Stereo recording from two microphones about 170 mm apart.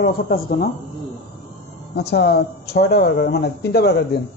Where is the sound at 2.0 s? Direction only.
75° left (ahead or behind).